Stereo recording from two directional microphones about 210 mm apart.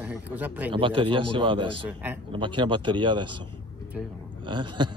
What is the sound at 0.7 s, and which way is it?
A man's voice, 25° right (ahead or behind).